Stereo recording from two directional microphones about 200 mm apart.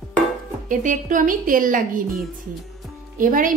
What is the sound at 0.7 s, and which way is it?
A woman's voice, 40° right (ahead or behind).